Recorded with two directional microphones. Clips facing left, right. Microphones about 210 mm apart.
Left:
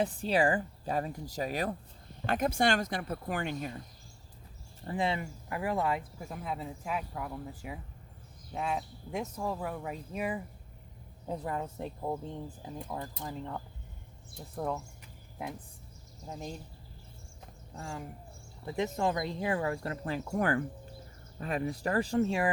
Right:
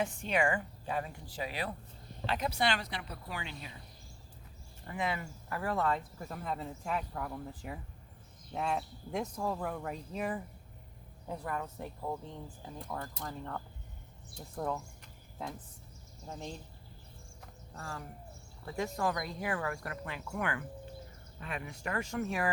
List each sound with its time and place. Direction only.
0.0 s speech: 35° left (ahead or behind)
4.9 s speech: 30° left (ahead or behind); by 10.4 s 10° left (ahead or behind)
11.3 s speech: 25° left (ahead or behind)
14.5 s speech: centre (ahead or behind)
16.2 s speech: 15° left (ahead or behind)
17.4 s a sound: 15° left (ahead or behind)
18.6 s speech: 20° left (ahead or behind)
20.1 s speech: 40° left (ahead or behind)